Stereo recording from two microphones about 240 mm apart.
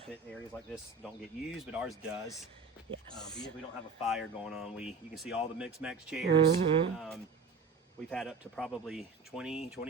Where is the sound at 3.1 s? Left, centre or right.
Centre.